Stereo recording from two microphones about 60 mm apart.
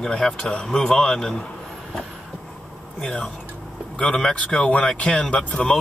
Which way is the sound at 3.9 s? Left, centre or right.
Centre.